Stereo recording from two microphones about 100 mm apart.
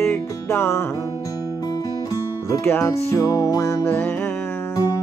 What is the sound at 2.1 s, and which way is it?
Music, 30° left (ahead or behind).